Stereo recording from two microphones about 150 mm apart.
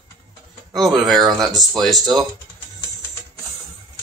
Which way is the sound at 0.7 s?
Centre (ahead or behind).